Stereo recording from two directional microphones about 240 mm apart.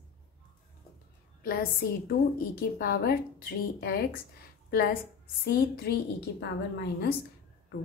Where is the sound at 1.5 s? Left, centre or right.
Left.